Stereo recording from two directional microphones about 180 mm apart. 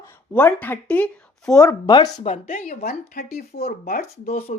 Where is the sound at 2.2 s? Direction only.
40° left (ahead or behind).